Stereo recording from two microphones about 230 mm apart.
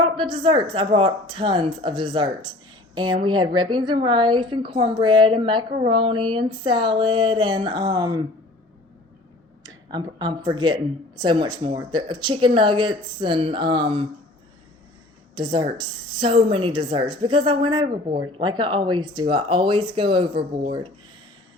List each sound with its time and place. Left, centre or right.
0.0 s speech: right
9.6 s speech: centre
15.4 s speech: right